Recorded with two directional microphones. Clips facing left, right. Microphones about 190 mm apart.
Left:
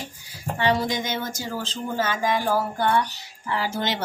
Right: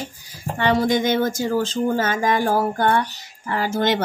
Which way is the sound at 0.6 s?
55° right (ahead or behind).